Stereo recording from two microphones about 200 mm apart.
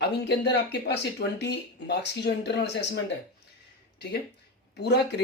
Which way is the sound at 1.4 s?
60° left (ahead or behind).